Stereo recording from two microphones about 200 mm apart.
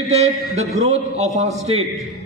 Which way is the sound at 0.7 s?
35° right (ahead or behind).